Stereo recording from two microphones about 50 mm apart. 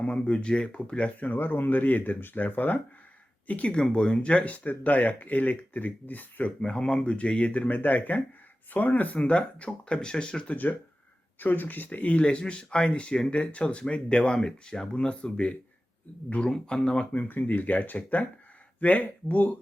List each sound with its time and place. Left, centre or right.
0.0 s speech: left
1.3 s speech: left
6.6 s speech: centre
10.5 s speech: left; by 17.2 s centre
17.2 s speech: left